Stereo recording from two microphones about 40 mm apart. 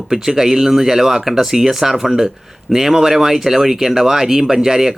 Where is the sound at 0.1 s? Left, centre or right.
Centre.